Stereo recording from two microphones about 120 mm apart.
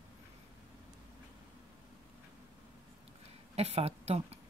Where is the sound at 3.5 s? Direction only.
60° right (ahead or behind).